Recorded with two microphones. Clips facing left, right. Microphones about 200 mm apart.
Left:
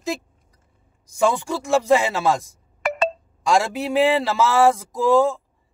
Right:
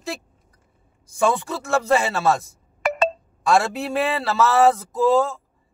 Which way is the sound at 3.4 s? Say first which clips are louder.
Even; 15° left (ahead or behind).